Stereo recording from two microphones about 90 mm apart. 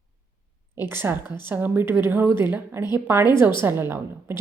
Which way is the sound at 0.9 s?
25° right (ahead or behind).